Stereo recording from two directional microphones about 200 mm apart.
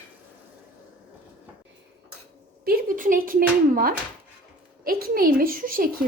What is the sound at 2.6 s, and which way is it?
A woman's voice, 45° right (ahead or behind).